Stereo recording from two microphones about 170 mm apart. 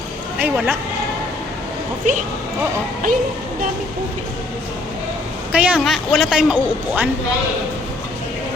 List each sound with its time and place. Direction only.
0.3 s speech: 10° right (ahead or behind)
2.0 s speech: 45° right (ahead or behind)
5.5 s a man's voice: 10° right (ahead or behind)